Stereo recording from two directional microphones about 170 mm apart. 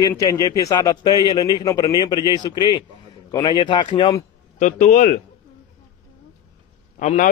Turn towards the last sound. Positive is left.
turn(degrees=45)  # may be behind; listen again after turning